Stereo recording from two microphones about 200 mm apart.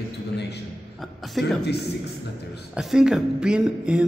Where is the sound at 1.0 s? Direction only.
Centre (ahead or behind).